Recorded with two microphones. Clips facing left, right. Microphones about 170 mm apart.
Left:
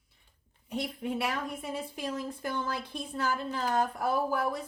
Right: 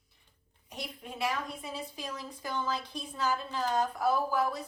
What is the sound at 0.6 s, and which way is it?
A woman's voice, 60° left (ahead or behind).